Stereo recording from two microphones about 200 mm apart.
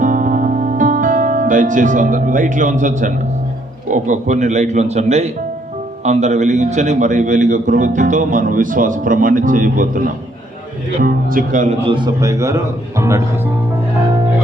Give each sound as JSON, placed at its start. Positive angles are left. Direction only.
{"t": 0.0, "sound": "music", "side_deg": -40}
{"t": 3.8, "sound": "a man's voice", "side_deg": -40}
{"t": 11.9, "sound": "speech", "side_deg": -20}